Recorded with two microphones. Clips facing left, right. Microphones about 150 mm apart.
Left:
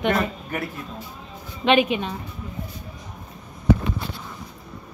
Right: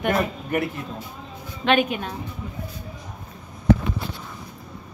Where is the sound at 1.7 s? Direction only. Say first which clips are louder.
Left 2 dB; centre (ahead or behind).